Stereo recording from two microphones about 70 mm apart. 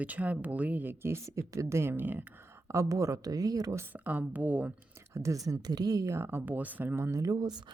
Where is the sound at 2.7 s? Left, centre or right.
Right.